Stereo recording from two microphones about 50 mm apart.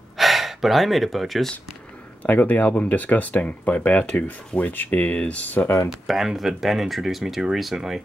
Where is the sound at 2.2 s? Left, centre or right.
Left.